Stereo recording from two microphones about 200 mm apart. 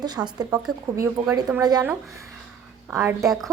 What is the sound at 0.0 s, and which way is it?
Speech, 20° right (ahead or behind).